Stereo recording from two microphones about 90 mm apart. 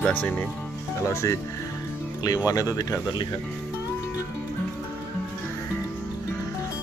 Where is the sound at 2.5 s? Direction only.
40° left (ahead or behind).